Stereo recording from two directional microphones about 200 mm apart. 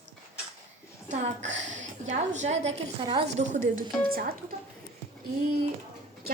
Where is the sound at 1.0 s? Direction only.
35° right (ahead or behind).